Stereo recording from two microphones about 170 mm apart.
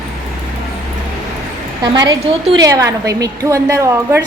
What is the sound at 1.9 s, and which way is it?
A woman's voice, 25° right (ahead or behind).